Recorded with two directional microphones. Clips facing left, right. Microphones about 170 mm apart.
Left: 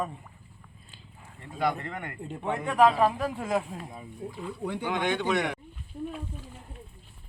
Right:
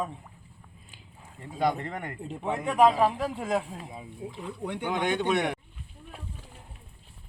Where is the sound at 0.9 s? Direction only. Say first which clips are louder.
Right 1 dB; 15° right (ahead or behind).